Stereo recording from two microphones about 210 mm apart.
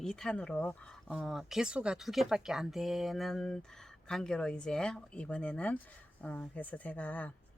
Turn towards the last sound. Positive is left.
turn(degrees=5)  # may be behind; listen again after turning